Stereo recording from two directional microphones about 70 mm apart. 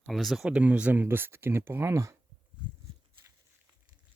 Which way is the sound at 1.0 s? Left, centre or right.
Right.